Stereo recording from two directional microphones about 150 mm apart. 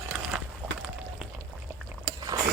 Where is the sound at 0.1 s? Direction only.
5° right (ahead or behind).